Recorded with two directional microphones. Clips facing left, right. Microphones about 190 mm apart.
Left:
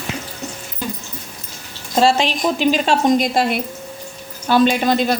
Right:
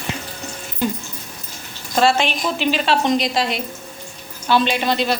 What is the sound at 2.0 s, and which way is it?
A woman's voice, 35° left (ahead or behind).